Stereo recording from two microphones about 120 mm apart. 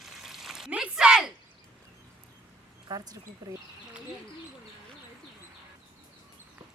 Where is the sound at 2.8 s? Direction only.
35° right (ahead or behind).